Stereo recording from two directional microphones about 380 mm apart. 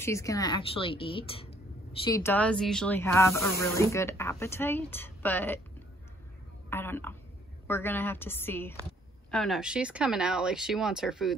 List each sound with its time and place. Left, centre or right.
0.0 s speech: centre
6.7 s speech: centre